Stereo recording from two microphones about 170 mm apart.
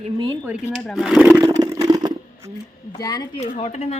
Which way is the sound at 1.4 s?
20° right (ahead or behind).